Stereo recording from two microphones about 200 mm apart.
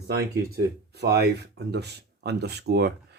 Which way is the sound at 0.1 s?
55° right (ahead or behind).